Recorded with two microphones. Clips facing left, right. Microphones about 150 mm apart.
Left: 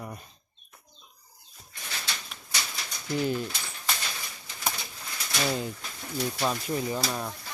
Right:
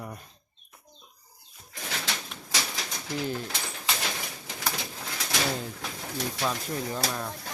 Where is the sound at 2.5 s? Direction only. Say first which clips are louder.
Right 3 dB; 90° right.